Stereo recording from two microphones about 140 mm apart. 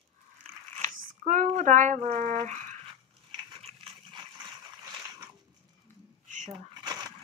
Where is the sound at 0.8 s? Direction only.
60° right (ahead or behind).